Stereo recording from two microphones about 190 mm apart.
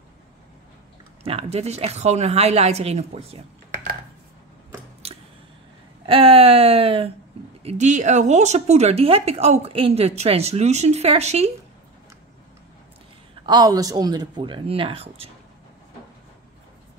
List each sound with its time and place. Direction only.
1.2 s speech: 30° right (ahead or behind)
5.0 s a sound: 30° right (ahead or behind)
6.0 s speech: 30° right (ahead or behind)
13.5 s speech: 20° right (ahead or behind)